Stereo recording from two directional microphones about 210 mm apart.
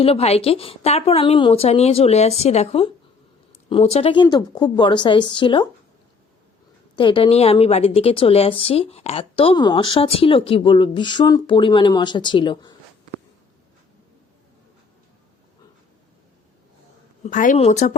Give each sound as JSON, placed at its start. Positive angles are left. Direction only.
{"t": 0.0, "sound": "a woman's voice", "side_deg": 30}
{"t": 6.9, "sound": "a woman's voice", "side_deg": 25}
{"t": 17.2, "sound": "speech", "side_deg": 35}